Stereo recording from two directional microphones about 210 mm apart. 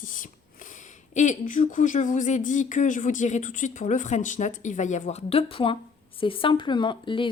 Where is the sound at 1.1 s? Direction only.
35° left (ahead or behind).